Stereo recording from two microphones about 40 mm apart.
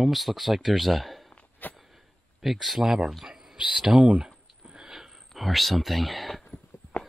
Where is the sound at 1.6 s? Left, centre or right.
Left.